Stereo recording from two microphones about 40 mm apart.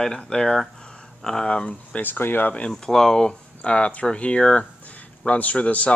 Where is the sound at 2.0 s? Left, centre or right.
Left.